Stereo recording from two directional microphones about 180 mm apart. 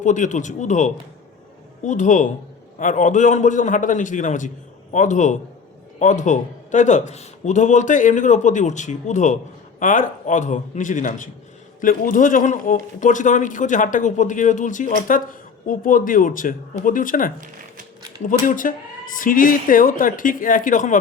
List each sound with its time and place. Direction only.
0.0 s speech: 45° left (ahead or behind)